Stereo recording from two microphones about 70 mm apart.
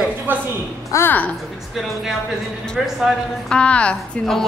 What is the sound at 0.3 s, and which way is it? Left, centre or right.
Speech, right.